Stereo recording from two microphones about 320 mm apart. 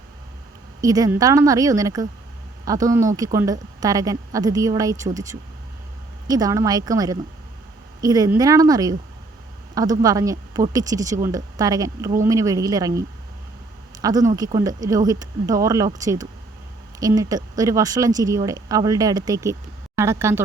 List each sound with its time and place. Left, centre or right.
0.8 s speech: centre